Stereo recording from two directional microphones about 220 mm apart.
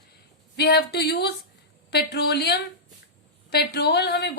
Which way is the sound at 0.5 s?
45° left (ahead or behind).